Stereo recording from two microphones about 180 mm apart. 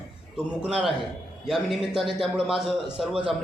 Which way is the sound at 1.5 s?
Centre (ahead or behind).